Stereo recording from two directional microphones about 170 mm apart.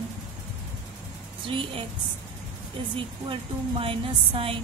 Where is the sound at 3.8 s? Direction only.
30° right (ahead or behind).